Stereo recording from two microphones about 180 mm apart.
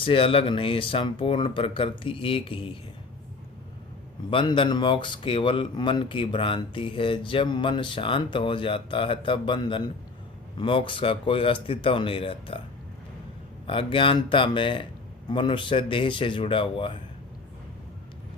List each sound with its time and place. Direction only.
0.0 s speech: 30° left (ahead or behind)
4.3 s speech: 30° left (ahead or behind)
13.7 s speech: 30° left (ahead or behind)